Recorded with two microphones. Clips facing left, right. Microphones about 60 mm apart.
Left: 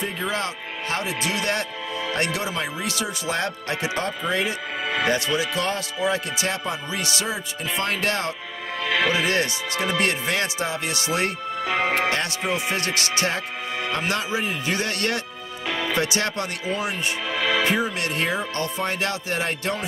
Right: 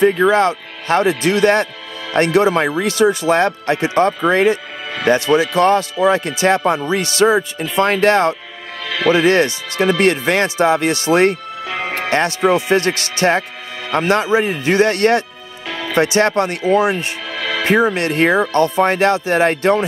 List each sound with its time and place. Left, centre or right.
0.0 s speech: right
8.8 s music: centre
9.1 s speech: right
11.6 s music: centre
12.1 s speech: right
15.7 s music: centre
16.0 s speech: right
17.3 s music: centre
17.6 s speech: right